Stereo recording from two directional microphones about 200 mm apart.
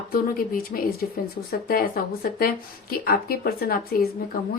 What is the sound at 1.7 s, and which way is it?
Speech, 50° left (ahead or behind).